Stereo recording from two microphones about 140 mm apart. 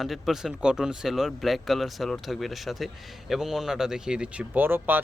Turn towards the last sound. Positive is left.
turn(degrees=-15)  # may be behind; listen again after turning